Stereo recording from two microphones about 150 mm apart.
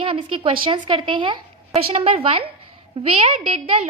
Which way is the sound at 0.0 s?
35° right (ahead or behind).